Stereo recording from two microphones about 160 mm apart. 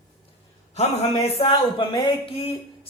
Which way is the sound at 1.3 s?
35° left (ahead or behind).